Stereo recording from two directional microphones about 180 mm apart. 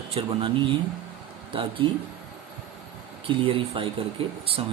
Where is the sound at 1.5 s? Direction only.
30° right (ahead or behind).